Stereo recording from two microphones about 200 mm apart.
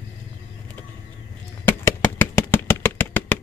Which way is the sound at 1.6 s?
10° left (ahead or behind).